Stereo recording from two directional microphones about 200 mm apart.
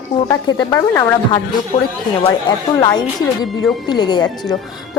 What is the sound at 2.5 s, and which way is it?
A woman's voice, 25° left (ahead or behind).